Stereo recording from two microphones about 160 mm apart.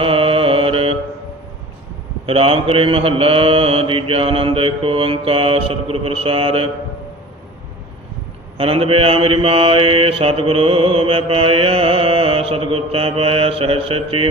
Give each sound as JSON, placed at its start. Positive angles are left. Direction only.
{"t": 0.0, "sound": "mantra", "side_deg": -35}
{"t": 2.2, "sound": "mantra", "side_deg": -35}
{"t": 8.5, "sound": "mantra", "side_deg": -35}